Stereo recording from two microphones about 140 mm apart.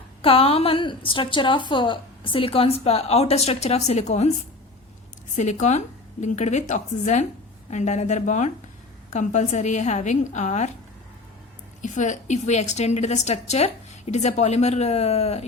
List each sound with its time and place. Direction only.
0.2 s a woman's voice: 45° left (ahead or behind)
5.4 s speech: 60° left (ahead or behind)
11.8 s a woman's voice: 60° left (ahead or behind)